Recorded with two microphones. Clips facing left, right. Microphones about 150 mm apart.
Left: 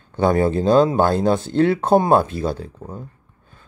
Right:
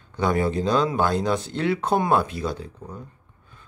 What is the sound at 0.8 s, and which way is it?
Speech, 35° left (ahead or behind).